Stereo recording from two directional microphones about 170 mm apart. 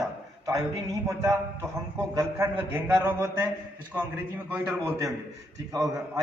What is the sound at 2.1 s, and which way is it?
Speech, 15° right (ahead or behind).